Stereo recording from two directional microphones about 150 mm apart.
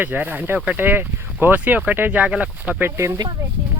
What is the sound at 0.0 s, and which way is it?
Speech, 15° right (ahead or behind).